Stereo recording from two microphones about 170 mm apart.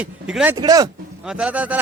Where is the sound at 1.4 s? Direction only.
10° right (ahead or behind).